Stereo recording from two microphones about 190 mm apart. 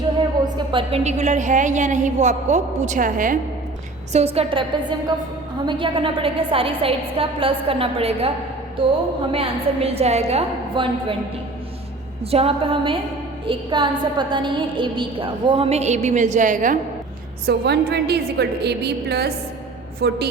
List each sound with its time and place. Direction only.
0.4 s a woman's voice: 25° right (ahead or behind); by 3.3 s 45° right (ahead or behind)
4.1 s a woman's voice: 35° right (ahead or behind)
9.3 s a woman's voice: 30° right (ahead or behind)
12.2 s a woman's voice: 30° right (ahead or behind)
17.4 s a woman's voice: 55° right (ahead or behind)